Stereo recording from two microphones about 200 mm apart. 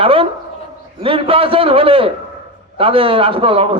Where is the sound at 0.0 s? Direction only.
25° right (ahead or behind).